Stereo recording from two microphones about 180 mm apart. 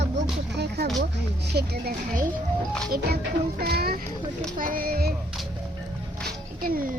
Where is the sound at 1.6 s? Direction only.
55° right (ahead or behind).